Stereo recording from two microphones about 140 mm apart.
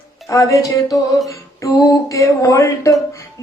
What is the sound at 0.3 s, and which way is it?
Speech, 25° left (ahead or behind).